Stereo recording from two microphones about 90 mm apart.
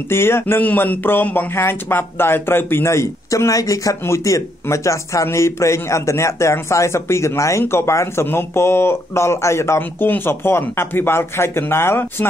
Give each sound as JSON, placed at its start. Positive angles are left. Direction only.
{"t": 0.1, "sound": "speech", "side_deg": 25}